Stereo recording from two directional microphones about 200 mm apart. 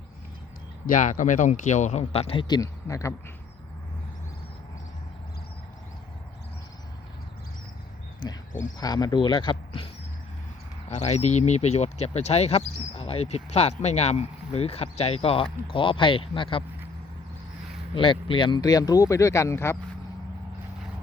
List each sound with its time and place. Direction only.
0.9 s speech: 40° left (ahead or behind); by 3.2 s 15° left (ahead or behind)
8.2 s a sound: 20° left (ahead or behind)
8.8 s speech: 20° left (ahead or behind)
17.9 s speech: 25° left (ahead or behind)